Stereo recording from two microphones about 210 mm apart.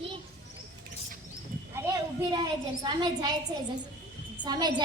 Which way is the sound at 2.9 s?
20° right (ahead or behind).